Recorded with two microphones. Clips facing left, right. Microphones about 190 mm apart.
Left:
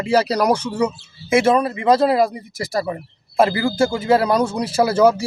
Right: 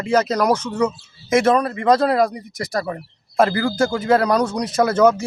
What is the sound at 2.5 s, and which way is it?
Speech, 25° left (ahead or behind).